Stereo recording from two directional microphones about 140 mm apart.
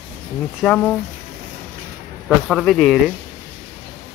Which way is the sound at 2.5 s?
5° left (ahead or behind).